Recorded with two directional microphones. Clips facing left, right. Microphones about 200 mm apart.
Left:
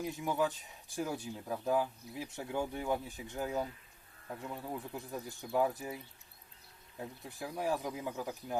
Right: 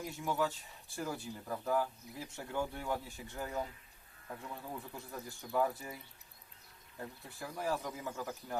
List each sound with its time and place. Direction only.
0.2 s speech: 15° left (ahead or behind)
7.0 s speech: 15° left (ahead or behind)